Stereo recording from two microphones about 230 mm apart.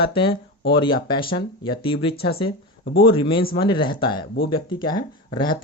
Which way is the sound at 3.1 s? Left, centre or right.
Left.